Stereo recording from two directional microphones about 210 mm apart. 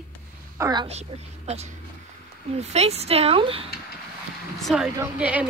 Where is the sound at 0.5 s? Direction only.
15° right (ahead or behind).